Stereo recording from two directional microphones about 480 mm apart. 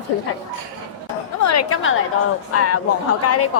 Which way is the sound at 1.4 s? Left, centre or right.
Left.